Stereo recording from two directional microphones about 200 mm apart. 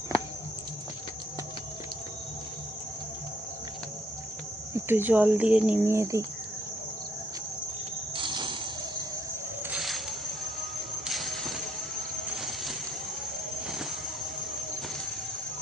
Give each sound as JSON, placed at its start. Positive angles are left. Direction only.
{"t": 4.7, "sound": "speech", "side_deg": -10}
{"t": 8.1, "sound": "a sound", "side_deg": -25}
{"t": 9.6, "sound": "music", "side_deg": 0}
{"t": 12.1, "sound": "train", "side_deg": 0}